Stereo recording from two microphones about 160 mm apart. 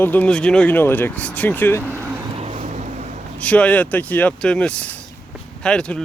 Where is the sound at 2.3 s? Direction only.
45° right (ahead or behind).